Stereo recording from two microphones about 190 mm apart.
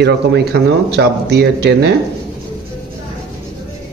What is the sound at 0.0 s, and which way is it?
Speech, 60° right (ahead or behind).